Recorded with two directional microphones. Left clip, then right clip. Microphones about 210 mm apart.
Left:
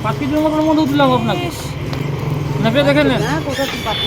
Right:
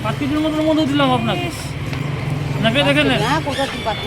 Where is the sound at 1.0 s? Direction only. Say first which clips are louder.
Left 3 dB; 10° right (ahead or behind).